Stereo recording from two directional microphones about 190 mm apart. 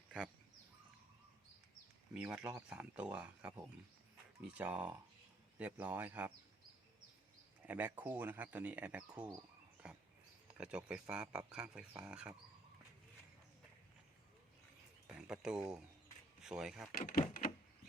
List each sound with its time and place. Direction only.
2.1 s speech: 5° right (ahead or behind)
7.6 s speech: 10° right (ahead or behind)
10.5 s speech: 5° right (ahead or behind)
15.3 s speech: 5° right (ahead or behind)
16.9 s speech: 45° left (ahead or behind)